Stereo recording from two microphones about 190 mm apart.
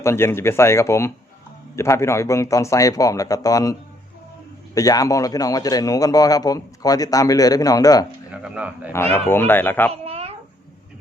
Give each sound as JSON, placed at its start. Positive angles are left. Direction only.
{"t": 0.0, "sound": "speech", "side_deg": 15}
{"t": 8.3, "sound": "speech", "side_deg": -5}
{"t": 9.3, "sound": "speech", "side_deg": 10}
{"t": 9.9, "sound": "babbling", "side_deg": -30}